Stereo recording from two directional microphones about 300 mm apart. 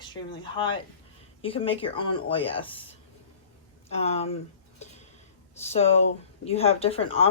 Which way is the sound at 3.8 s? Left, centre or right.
Left.